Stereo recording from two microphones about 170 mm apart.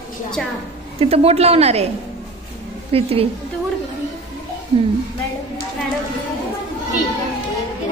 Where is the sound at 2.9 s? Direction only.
35° right (ahead or behind).